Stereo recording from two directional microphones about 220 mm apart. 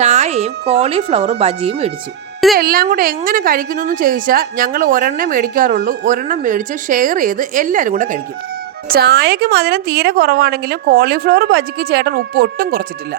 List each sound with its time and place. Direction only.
0.0 s a sound: 30° right (ahead or behind)
0.7 s speech: 25° right (ahead or behind)
2.6 s a woman's voice: 45° right (ahead or behind)